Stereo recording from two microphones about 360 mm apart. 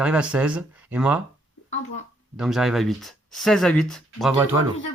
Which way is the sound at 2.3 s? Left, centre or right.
Centre.